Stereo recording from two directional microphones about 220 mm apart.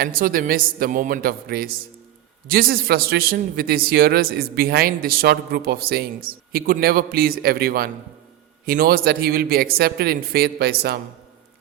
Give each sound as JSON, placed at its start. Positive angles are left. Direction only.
{"t": 0.0, "sound": "a woman's voice", "side_deg": -40}